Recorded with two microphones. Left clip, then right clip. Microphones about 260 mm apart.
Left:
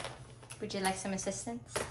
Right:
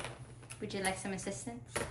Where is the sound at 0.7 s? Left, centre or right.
Centre.